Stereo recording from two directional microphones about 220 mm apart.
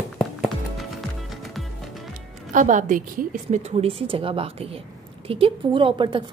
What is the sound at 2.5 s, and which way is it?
A woman's voice, 35° right (ahead or behind).